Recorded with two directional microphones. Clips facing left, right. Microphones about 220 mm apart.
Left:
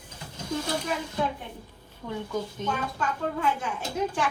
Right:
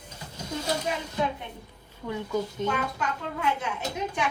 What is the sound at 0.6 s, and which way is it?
Speech, 25° right (ahead or behind).